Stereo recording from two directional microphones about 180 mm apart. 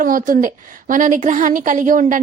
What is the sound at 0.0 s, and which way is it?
A woman's voice, 50° right (ahead or behind).